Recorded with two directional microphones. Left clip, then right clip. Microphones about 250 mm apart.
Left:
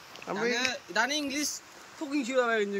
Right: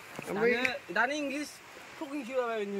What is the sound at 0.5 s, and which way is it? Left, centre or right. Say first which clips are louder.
Speech: left 1 dB; right.